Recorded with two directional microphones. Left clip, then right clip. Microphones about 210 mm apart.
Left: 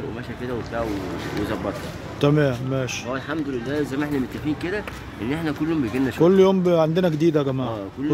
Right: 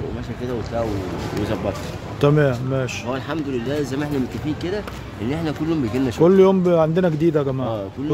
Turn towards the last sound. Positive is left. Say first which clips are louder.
# right 1 dB
turn(degrees=5)  # may be behind; listen again after turning